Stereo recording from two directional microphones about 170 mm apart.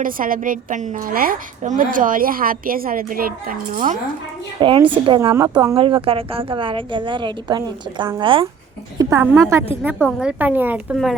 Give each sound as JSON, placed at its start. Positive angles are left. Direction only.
{"t": 0.0, "sound": "a woman's voice", "side_deg": -55}
{"t": 4.6, "sound": "a woman's voice", "side_deg": -25}
{"t": 5.3, "sound": "a woman's voice", "side_deg": -20}
{"t": 5.7, "sound": "a woman's voice", "side_deg": -30}
{"t": 9.0, "sound": "a woman's voice", "side_deg": -15}